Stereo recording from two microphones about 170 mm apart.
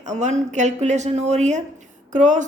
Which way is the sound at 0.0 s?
45° right (ahead or behind).